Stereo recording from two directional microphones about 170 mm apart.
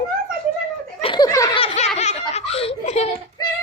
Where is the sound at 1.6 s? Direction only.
40° left (ahead or behind).